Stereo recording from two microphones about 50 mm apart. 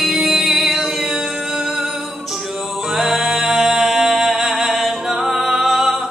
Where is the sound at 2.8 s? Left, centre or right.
Centre.